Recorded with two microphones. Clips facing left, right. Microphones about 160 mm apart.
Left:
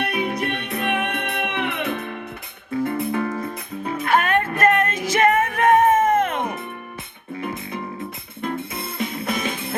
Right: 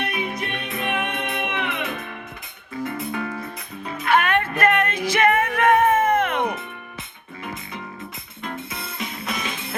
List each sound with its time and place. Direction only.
0.0 s music: 60° left (ahead or behind); by 6.4 s 40° left (ahead or behind)
8.4 s music: 55° left (ahead or behind)